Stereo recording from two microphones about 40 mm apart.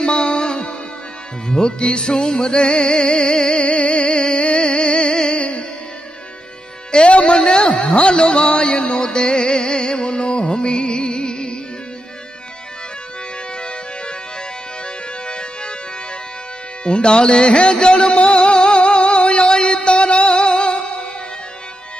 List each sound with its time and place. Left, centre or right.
0.0 s music: left
3.6 s music: left
6.9 s music: left
13.6 s music: left
15.2 s music: left
16.8 s music: left